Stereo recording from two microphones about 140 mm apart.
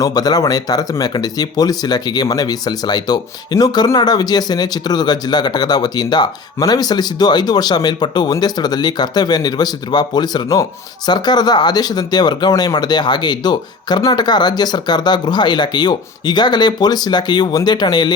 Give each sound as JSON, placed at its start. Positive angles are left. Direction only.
{"t": 0.0, "sound": "speech", "side_deg": 30}